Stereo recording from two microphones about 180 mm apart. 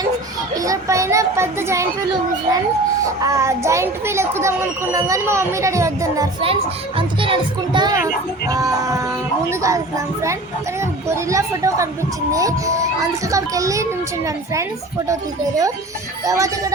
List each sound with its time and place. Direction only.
0.5 s a child's voice: 20° right (ahead or behind)
3.2 s a child's voice: 15° right (ahead or behind)
6.4 s a child's voice: 30° right (ahead or behind)